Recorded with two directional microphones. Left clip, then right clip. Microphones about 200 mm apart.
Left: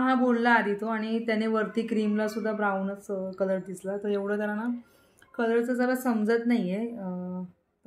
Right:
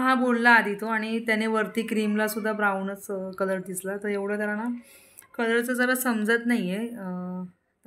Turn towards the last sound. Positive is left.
turn(degrees=-5)  # may be behind; listen again after turning